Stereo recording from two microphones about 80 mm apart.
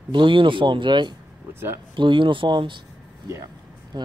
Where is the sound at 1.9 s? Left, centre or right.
Right.